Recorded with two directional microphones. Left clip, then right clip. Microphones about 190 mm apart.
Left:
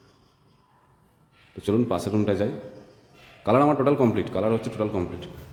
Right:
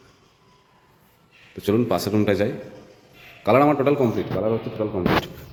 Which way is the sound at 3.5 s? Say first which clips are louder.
Right 3 dB; 5° left (ahead or behind).